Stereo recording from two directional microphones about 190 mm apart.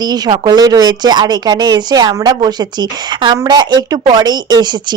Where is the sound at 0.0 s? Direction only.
20° right (ahead or behind).